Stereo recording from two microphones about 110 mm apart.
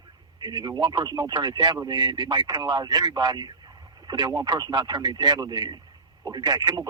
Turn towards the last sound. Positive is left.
turn(degrees=-40)  # may be behind; listen again after turning